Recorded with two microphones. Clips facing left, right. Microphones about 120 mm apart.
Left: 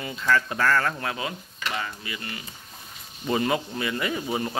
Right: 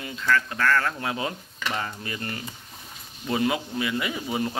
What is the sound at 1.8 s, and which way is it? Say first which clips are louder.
Stir: right 2 dB; 40° right (ahead or behind).